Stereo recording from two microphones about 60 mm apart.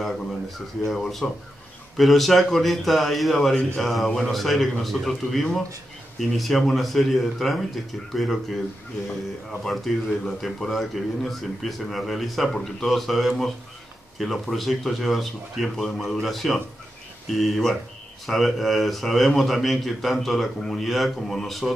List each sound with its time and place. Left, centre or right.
0.8 s speech: centre
9.7 s speech: centre